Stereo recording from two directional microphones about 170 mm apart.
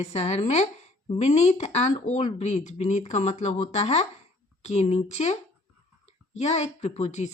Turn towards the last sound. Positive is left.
turn(degrees=40)  # may be behind; listen again after turning